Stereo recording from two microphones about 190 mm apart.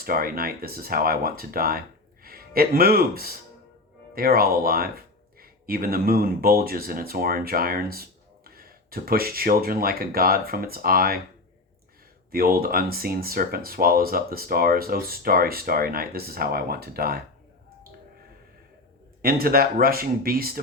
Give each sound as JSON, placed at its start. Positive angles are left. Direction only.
{"t": 0.0, "sound": "speech", "side_deg": -50}
{"t": 12.3, "sound": "speech", "side_deg": -50}
{"t": 19.2, "sound": "speech", "side_deg": -50}